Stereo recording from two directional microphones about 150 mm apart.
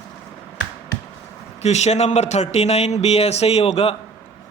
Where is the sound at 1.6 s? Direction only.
45° left (ahead or behind).